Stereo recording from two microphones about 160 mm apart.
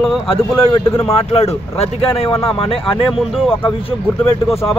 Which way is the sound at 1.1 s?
40° left (ahead or behind).